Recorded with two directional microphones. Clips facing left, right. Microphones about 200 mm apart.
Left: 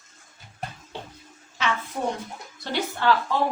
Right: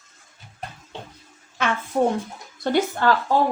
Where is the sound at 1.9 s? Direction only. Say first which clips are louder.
Right 8 dB; 40° right (ahead or behind).